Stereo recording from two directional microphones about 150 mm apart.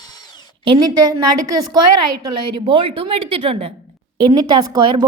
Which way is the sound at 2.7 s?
40° right (ahead or behind).